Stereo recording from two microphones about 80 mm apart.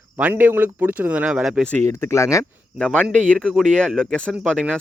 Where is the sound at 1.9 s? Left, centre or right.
Left.